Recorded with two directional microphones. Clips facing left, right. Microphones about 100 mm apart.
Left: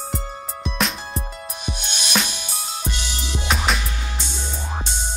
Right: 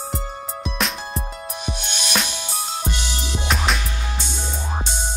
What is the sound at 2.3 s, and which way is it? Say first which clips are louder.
Music: right 3 dB; 25° right (ahead or behind).